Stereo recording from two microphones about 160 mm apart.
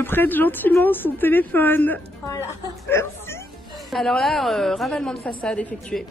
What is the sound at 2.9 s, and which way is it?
Chuckle, 15° left (ahead or behind).